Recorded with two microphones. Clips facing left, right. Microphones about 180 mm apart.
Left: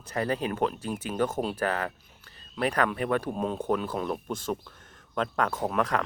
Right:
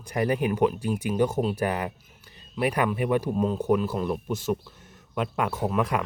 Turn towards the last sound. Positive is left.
turn(degrees=-10)  # may be behind; listen again after turning